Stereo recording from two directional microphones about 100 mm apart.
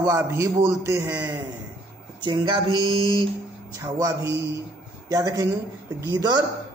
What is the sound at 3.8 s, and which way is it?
A man's voice, 30° right (ahead or behind).